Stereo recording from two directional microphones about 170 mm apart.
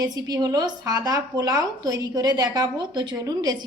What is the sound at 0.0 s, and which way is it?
Speech, 20° right (ahead or behind).